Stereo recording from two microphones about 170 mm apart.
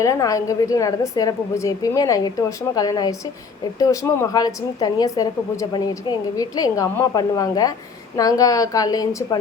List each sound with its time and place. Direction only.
0.0 s a woman's voice: 20° left (ahead or behind)